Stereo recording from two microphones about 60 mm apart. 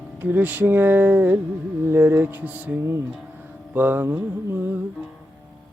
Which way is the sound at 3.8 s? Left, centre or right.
Right.